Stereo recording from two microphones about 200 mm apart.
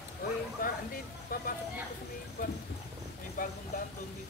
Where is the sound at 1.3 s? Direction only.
45° left (ahead or behind).